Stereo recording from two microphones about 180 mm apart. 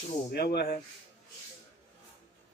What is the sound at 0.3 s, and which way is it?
Speech, 60° left (ahead or behind).